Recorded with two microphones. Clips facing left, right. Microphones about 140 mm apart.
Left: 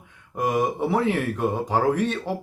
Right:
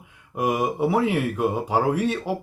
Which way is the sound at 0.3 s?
10° right (ahead or behind).